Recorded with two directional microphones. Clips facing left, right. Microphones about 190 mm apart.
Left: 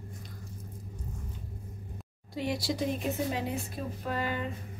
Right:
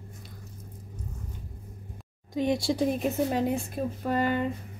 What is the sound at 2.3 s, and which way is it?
Speech, 25° right (ahead or behind).